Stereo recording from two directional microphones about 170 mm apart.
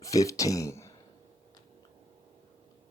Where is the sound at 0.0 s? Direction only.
20° left (ahead or behind).